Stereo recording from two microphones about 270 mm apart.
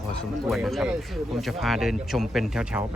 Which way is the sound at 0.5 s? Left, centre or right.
Centre.